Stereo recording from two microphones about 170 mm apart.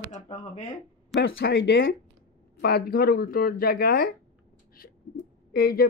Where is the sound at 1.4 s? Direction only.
70° left (ahead or behind).